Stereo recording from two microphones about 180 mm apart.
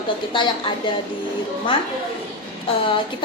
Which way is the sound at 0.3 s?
25° left (ahead or behind).